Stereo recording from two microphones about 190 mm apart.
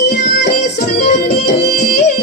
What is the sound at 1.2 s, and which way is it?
Music, 60° left (ahead or behind).